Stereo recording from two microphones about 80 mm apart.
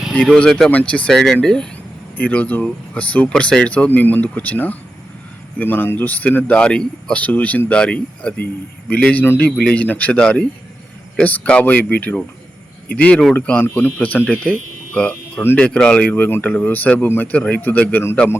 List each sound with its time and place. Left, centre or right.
0.1 s speech: centre
1.1 s speech: centre; by 18.0 s left